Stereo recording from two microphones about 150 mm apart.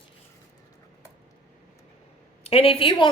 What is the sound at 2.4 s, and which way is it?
Speech, 40° left (ahead or behind).